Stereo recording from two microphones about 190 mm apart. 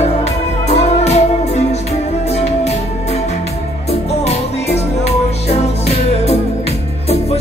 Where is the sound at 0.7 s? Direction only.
35° left (ahead or behind).